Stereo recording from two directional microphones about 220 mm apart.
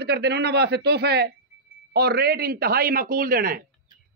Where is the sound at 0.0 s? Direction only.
50° right (ahead or behind).